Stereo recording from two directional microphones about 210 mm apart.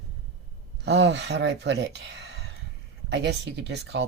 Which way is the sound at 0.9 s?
55° right (ahead or behind).